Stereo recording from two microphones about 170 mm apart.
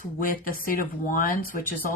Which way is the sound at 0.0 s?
55° left (ahead or behind).